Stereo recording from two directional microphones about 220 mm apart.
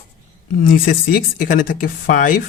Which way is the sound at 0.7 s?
40° left (ahead or behind).